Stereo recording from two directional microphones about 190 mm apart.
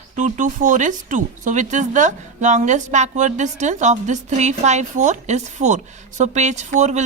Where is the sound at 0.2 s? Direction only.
40° right (ahead or behind).